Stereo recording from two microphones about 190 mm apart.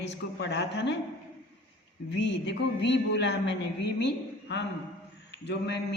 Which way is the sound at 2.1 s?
65° left (ahead or behind).